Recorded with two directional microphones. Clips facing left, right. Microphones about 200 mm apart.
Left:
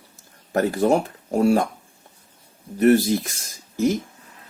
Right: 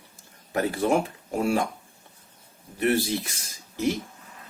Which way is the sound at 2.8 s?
45° left (ahead or behind).